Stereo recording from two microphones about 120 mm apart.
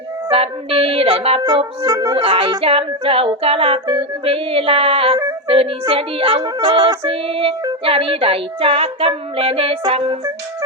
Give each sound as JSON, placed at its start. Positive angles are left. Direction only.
{"t": 0.3, "sound": "music", "side_deg": -50}
{"t": 1.9, "sound": "music", "side_deg": -30}
{"t": 2.1, "sound": "music", "side_deg": -50}
{"t": 5.9, "sound": "speech", "side_deg": -50}
{"t": 7.0, "sound": "music", "side_deg": -50}